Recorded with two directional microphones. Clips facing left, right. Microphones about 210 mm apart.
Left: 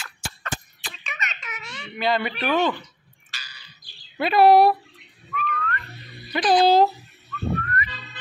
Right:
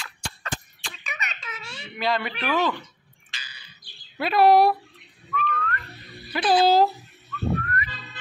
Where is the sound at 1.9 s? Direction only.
Centre (ahead or behind).